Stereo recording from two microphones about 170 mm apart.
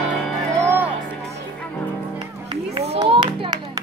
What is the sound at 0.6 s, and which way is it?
Music, 10° right (ahead or behind).